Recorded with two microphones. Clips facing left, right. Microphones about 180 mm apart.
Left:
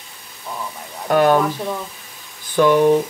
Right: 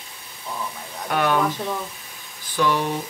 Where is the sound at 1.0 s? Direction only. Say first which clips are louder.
Left 8 dB; 40° left (ahead or behind).